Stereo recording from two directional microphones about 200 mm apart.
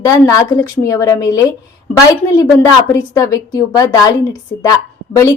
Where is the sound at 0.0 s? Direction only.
15° left (ahead or behind).